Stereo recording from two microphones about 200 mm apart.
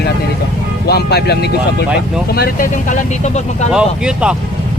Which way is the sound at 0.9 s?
55° left (ahead or behind).